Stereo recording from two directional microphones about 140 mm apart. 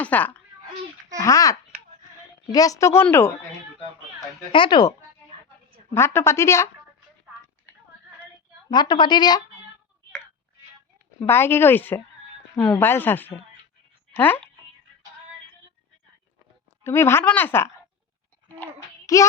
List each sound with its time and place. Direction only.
0.0 s speech: 10° left (ahead or behind)
1.2 s speech: 25° left (ahead or behind)
4.5 s a woman's voice: 35° left (ahead or behind)
5.9 s speech: 15° left (ahead or behind)
8.7 s a woman's voice: 35° left (ahead or behind)
11.2 s a woman's voice: 15° left (ahead or behind)
16.8 s a woman's voice: 20° left (ahead or behind)
19.1 s speech: 25° left (ahead or behind)